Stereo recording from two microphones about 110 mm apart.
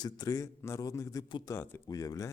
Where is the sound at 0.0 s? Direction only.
35° left (ahead or behind).